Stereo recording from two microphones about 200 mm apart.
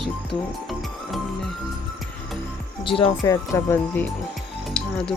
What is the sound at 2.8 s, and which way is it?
Speech, 25° left (ahead or behind).